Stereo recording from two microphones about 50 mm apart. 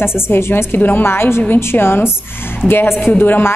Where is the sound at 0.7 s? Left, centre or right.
Left.